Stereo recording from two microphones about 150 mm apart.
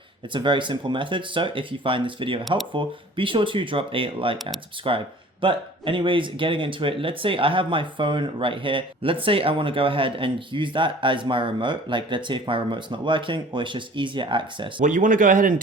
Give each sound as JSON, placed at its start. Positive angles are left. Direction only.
{"t": 0.3, "sound": "speech", "side_deg": -30}
{"t": 14.8, "sound": "speech", "side_deg": -55}